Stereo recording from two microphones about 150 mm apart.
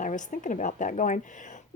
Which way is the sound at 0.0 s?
55° left (ahead or behind).